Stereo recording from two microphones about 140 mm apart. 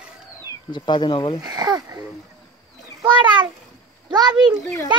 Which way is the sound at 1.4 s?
30° right (ahead or behind).